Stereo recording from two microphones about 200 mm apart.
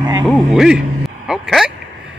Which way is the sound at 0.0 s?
20° right (ahead or behind).